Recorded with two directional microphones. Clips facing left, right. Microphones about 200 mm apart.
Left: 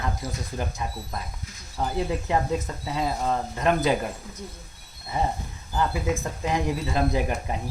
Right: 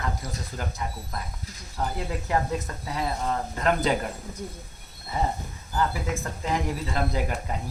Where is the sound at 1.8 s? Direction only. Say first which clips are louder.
Left 4 dB; 20° left (ahead or behind).